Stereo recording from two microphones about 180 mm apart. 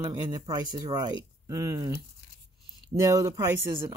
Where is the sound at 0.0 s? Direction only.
25° right (ahead or behind).